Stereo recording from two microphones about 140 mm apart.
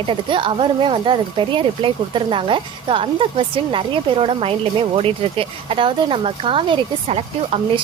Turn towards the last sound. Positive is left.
turn(degrees=-45)  # may be behind; listen again after turning